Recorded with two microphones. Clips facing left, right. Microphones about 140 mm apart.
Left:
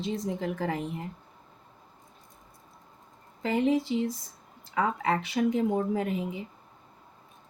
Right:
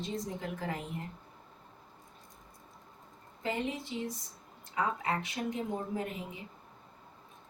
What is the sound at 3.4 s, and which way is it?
Speech, 90° left.